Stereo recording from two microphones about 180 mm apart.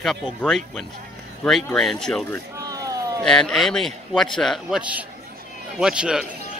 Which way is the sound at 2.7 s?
20° right (ahead or behind).